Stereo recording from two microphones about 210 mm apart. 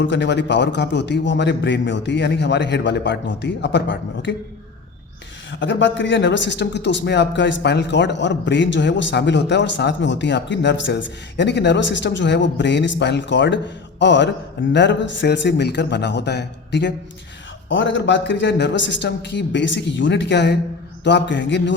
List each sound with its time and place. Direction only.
0.0 s a man's voice: 60° left (ahead or behind)
5.5 s a man's voice: 60° left (ahead or behind)